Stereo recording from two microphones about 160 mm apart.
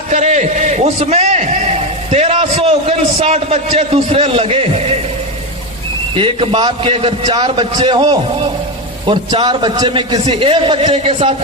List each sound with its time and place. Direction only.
0.1 s a man's voice: 50° right (ahead or behind)
6.1 s a man's voice: 35° right (ahead or behind)